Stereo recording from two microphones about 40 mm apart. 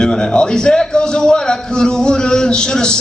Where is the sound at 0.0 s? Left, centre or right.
Centre.